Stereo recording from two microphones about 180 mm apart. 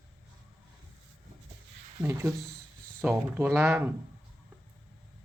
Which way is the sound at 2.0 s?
15° right (ahead or behind).